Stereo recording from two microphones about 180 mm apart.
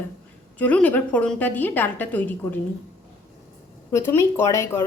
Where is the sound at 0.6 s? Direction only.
10° left (ahead or behind).